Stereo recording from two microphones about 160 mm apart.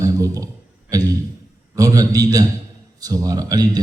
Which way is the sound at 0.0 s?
20° right (ahead or behind).